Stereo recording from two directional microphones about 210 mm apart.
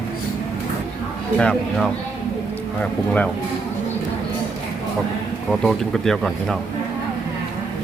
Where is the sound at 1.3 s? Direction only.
5° left (ahead or behind).